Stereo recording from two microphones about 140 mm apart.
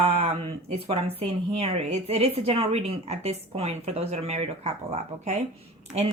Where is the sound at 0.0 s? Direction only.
45° right (ahead or behind).